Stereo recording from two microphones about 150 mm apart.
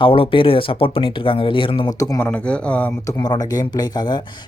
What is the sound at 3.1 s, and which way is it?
Speech, 25° left (ahead or behind).